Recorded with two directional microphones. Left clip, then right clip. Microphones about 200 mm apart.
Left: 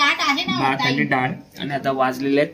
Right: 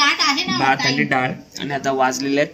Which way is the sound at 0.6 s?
Centre (ahead or behind).